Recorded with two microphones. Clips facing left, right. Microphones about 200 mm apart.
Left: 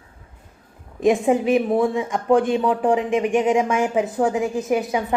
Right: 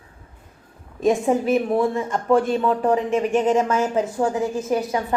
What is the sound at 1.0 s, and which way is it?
A woman's voice, 15° left (ahead or behind).